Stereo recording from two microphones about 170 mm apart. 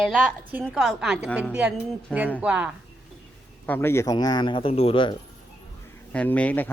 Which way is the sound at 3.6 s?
10° left (ahead or behind).